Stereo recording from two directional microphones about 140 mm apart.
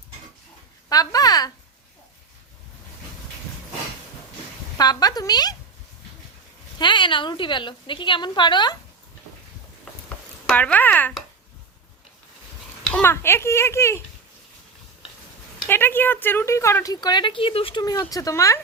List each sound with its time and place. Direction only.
0.9 s speech: 25° left (ahead or behind)
4.8 s speech: 25° left (ahead or behind)
6.7 s a woman's voice: 35° left (ahead or behind)
10.5 s speech: 10° left (ahead or behind)
13.0 s speech: 15° left (ahead or behind)
15.7 s speech: 15° left (ahead or behind); by 17.8 s 40° left (ahead or behind)
17.8 s speech: 25° left (ahead or behind)